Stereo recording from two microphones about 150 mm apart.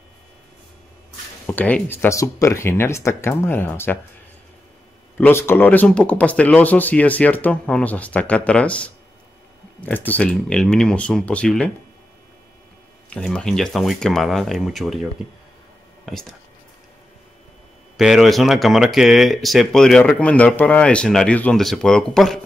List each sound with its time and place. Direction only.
1.5 s speech: 10° left (ahead or behind)
5.1 s speech: 15° left (ahead or behind)
13.1 s speech: 5° left (ahead or behind)
16.1 s speech: centre (ahead or behind)
17.9 s speech: centre (ahead or behind)